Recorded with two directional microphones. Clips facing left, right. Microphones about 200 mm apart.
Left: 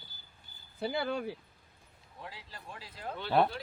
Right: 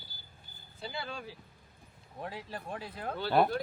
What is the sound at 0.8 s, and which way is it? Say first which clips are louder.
Speech: left 8 dB; 60° left (ahead or behind).